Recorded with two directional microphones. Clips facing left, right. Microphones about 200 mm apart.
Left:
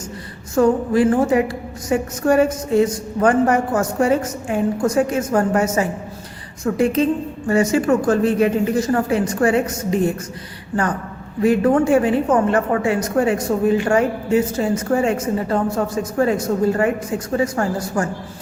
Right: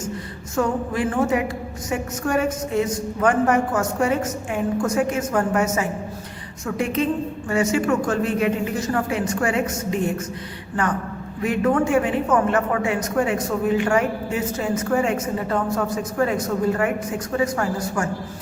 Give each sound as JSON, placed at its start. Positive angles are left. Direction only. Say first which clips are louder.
{"t": 0.5, "sound": "a woman's voice", "louder": "left 7 dB", "side_deg": 35}
{"t": 11.4, "sound": "a woman's voice", "louder": "left 5 dB", "side_deg": 35}
{"t": 17.3, "sound": "a woman's voice", "louder": "left 2 dB", "side_deg": 35}